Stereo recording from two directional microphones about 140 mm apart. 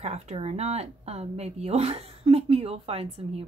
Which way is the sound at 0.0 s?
50° right (ahead or behind).